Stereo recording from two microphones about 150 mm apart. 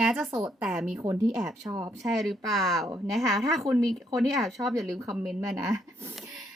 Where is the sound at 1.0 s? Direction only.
20° right (ahead or behind).